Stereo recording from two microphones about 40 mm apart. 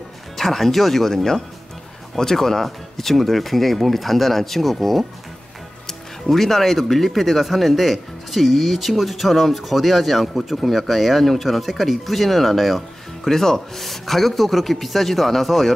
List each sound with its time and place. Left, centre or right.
0.4 s speech: centre